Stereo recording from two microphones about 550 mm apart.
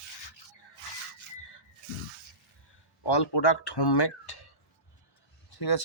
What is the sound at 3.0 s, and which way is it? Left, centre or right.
Speech, left.